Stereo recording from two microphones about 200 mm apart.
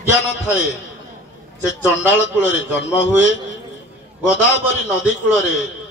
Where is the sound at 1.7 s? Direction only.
65° left (ahead or behind).